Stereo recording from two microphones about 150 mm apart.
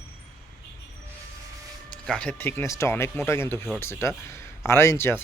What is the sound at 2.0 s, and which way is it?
Speech, 5° left (ahead or behind).